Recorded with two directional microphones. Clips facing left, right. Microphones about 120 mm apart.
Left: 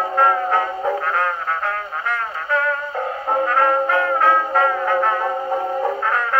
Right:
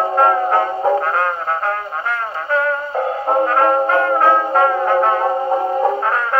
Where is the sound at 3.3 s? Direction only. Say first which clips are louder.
Right 3 dB; 25° right (ahead or behind).